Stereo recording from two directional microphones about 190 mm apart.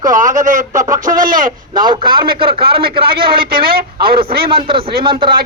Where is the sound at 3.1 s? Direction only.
55° right (ahead or behind).